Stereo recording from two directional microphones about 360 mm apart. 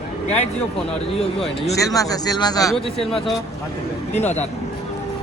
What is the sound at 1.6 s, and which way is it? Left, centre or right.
A man's voice, centre.